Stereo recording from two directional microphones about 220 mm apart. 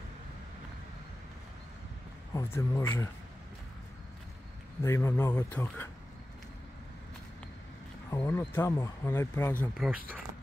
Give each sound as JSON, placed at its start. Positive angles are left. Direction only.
{"t": 2.3, "sound": "speech", "side_deg": 15}
{"t": 4.8, "sound": "speech", "side_deg": 10}
{"t": 8.1, "sound": "speech", "side_deg": 15}